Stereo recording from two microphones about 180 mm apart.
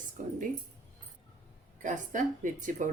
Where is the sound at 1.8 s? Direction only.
45° right (ahead or behind).